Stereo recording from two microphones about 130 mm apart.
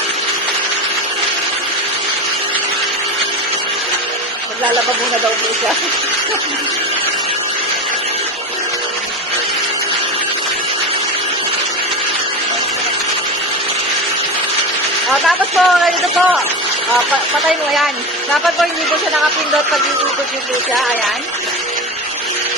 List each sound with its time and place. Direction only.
15.3 s speech: centre (ahead or behind)